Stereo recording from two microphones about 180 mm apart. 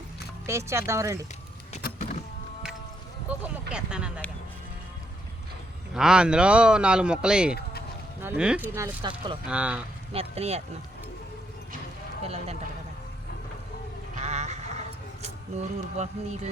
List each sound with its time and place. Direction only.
0.4 s speech: 15° right (ahead or behind)
1.8 s power windows: 45° left (ahead or behind)
3.7 s speech: 5° right (ahead or behind)
5.9 s speech: 5° right (ahead or behind)
7.5 s honk: 60° left (ahead or behind)
8.2 s speech: 10° right (ahead or behind)
9.0 s speech: 25° right (ahead or behind)
9.5 s speech: 5° right (ahead or behind)
10.1 s a sound: 35° right (ahead or behind)
12.2 s speech: 35° right (ahead or behind)
14.2 s a sound: 40° right (ahead or behind)